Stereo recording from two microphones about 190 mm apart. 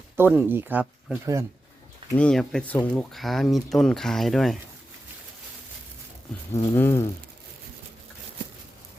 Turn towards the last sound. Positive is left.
turn(degrees=15)  # may be behind; listen again after turning